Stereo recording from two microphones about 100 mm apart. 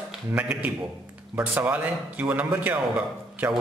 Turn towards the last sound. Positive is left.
turn(degrees=-15)  # may be behind; listen again after turning